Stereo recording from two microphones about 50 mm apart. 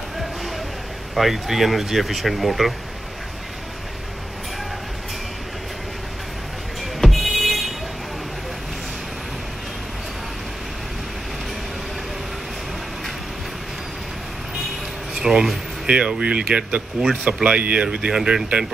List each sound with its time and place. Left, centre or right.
1.1 s speech: centre
6.8 s music: centre
15.1 s speech: centre
15.9 s speech: centre
17.8 s speech: centre